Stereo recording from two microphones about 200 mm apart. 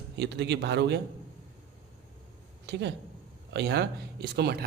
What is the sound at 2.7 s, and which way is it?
A man's voice, 55° right (ahead or behind).